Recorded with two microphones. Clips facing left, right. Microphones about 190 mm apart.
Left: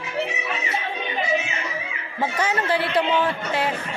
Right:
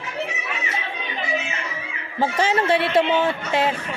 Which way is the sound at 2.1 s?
30° right (ahead or behind).